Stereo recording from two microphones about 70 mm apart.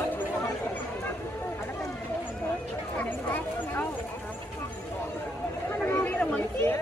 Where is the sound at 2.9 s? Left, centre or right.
Left.